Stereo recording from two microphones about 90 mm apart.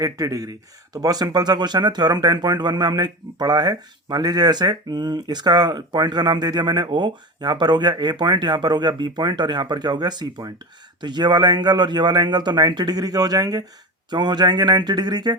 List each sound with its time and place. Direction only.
0.0 s speech: 40° right (ahead or behind)